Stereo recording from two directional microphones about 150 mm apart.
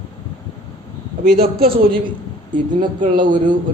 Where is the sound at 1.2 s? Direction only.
90° right.